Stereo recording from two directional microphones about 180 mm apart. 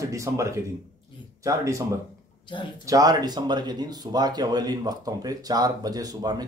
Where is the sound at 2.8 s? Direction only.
20° right (ahead or behind).